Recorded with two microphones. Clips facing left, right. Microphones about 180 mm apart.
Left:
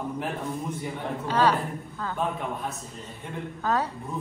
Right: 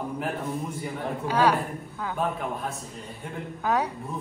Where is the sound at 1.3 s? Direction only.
10° right (ahead or behind).